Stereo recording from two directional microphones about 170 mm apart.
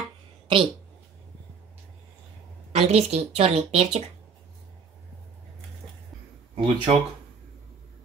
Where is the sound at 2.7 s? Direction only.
40° right (ahead or behind).